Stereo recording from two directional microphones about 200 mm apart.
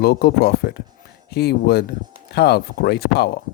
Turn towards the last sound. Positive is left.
turn(degrees=55)  # may be behind; listen again after turning